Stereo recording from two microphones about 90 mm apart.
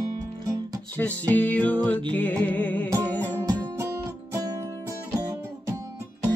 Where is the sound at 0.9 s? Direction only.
20° left (ahead or behind).